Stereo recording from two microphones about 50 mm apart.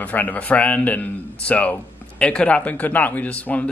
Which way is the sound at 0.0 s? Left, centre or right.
Left.